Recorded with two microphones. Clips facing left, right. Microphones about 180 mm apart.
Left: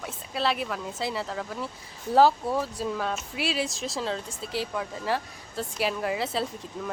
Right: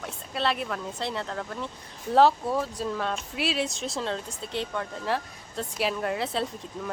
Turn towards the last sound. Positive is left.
turn(degrees=0)  # may be behind; listen again after turning